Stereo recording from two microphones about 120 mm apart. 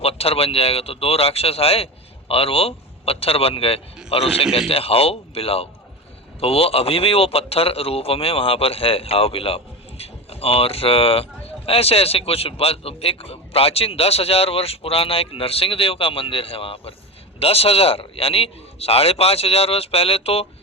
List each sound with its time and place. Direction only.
0.0 s a man's voice: 55° left (ahead or behind)